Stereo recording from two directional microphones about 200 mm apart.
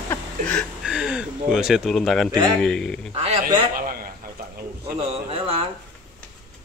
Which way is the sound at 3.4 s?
45° right (ahead or behind).